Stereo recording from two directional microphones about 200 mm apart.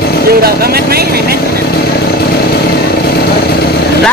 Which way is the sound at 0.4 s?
50° right (ahead or behind).